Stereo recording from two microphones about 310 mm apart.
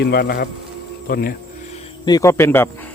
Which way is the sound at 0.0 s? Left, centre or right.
Left.